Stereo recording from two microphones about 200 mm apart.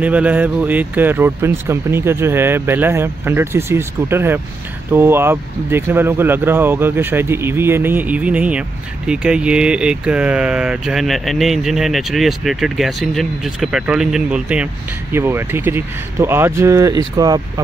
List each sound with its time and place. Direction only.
0.0 s speech: 10° right (ahead or behind)